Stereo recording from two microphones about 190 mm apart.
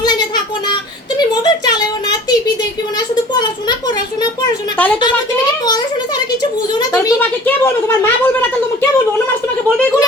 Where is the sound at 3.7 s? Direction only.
20° left (ahead or behind).